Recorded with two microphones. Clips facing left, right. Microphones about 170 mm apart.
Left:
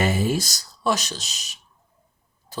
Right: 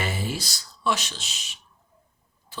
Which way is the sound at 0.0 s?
45° left (ahead or behind).